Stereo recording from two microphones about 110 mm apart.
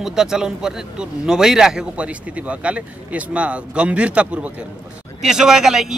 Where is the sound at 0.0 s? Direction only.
5° right (ahead or behind).